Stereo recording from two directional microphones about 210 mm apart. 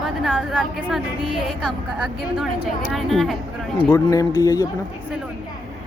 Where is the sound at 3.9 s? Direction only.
15° left (ahead or behind).